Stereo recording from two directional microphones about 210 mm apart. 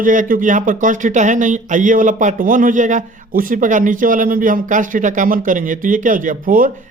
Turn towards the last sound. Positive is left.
turn(degrees=-40)  # may be behind; listen again after turning